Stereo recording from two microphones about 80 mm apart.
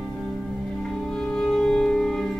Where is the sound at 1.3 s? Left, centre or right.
Centre.